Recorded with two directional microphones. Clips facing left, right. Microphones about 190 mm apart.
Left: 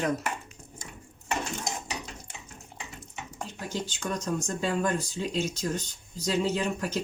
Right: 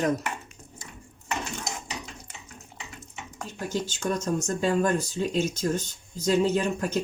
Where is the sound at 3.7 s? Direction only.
45° right (ahead or behind).